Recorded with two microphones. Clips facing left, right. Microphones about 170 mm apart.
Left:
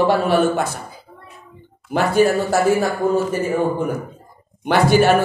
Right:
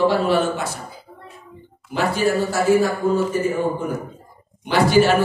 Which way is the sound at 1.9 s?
50° left (ahead or behind).